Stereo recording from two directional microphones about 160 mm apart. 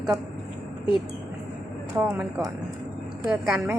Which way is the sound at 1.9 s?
10° right (ahead or behind).